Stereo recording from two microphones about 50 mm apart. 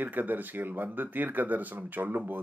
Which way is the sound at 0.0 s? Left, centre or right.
Right.